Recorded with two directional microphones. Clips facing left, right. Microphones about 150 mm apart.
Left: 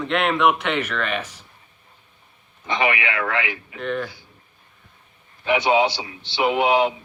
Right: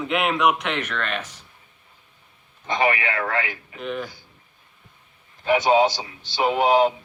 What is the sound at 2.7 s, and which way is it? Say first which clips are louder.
A man's voice: even; 40° right (ahead or behind).